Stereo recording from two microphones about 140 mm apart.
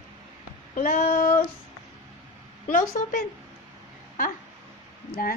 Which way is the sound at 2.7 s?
85° left.